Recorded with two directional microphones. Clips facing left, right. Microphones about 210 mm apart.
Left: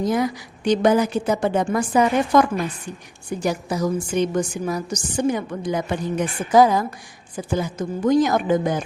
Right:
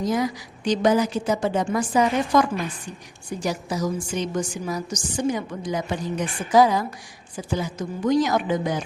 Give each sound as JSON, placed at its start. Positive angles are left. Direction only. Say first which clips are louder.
{"t": 0.0, "sound": "a woman's voice", "louder": "left 2 dB", "side_deg": 55}